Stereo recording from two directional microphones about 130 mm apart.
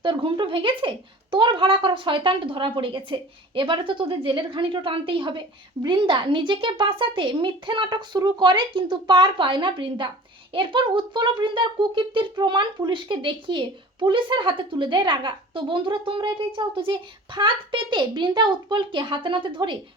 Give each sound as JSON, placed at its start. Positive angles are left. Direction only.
{"t": 0.0, "sound": "speech", "side_deg": -40}